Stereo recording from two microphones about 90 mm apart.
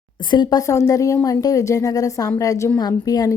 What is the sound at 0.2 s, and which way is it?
Speech, 55° left (ahead or behind).